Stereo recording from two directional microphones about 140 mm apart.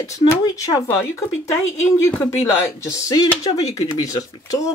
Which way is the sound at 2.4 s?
25° left (ahead or behind).